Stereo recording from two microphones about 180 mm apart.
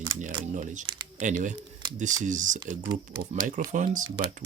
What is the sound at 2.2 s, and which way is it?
Speech, 45° right (ahead or behind).